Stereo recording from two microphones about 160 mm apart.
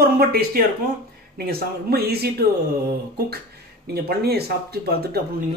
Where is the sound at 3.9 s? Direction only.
80° right.